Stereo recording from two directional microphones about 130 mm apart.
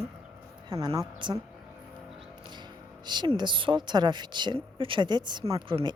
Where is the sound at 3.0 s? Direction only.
35° right (ahead or behind).